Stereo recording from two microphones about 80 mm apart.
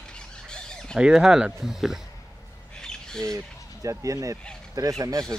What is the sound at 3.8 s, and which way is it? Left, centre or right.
Speech, right.